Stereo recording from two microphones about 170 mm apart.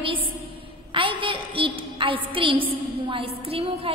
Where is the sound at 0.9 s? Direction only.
30° right (ahead or behind).